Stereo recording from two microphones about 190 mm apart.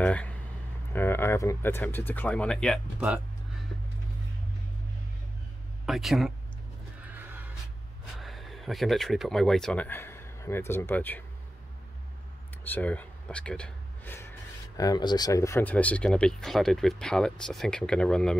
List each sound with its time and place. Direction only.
0.0 s a sound: 5° left (ahead or behind)
0.9 s speech: 10° left (ahead or behind)
5.9 s speech: centre (ahead or behind)
7.0 s neigh: 10° right (ahead or behind)
8.2 s speech: centre (ahead or behind)
12.6 s speech: 10° left (ahead or behind)